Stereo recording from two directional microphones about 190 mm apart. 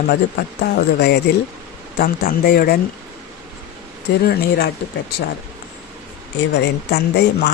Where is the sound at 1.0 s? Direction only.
60° left (ahead or behind).